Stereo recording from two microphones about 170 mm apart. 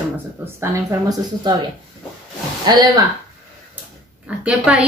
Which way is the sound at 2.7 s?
25° right (ahead or behind).